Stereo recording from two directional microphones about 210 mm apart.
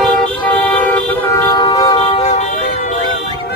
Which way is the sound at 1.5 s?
20° left (ahead or behind).